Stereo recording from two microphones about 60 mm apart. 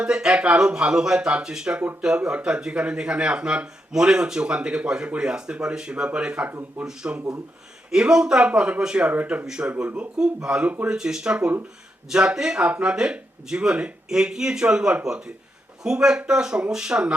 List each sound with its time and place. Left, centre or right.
0.0 s speech: centre
9.1 s speech: right
9.5 s speech: centre
10.8 s speech: centre